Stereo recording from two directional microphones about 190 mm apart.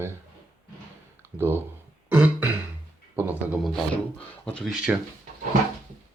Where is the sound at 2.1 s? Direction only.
10° right (ahead or behind).